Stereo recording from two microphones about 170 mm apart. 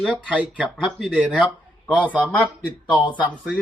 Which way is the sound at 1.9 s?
10° right (ahead or behind).